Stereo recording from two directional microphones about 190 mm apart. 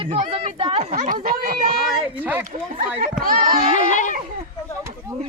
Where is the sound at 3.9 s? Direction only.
40° left (ahead or behind).